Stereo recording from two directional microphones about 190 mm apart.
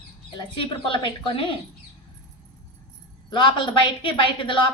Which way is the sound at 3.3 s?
25° left (ahead or behind).